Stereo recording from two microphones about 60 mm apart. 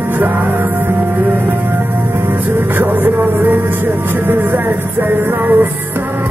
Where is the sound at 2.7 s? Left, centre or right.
Right.